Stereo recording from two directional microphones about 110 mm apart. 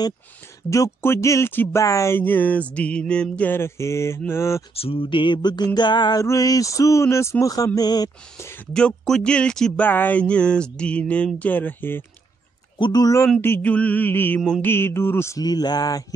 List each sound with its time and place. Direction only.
0.7 s speech: 30° left (ahead or behind)
4.7 s a sound: 55° left (ahead or behind); by 5.7 s 40° left (ahead or behind)
5.8 s speech: 45° left (ahead or behind)
6.2 s speech: 30° left (ahead or behind)
8.7 s speech: 5° left (ahead or behind)
12.7 s speech: 40° left (ahead or behind)
13.4 s speech: 15° left (ahead or behind)
15.4 s speech: 40° left (ahead or behind)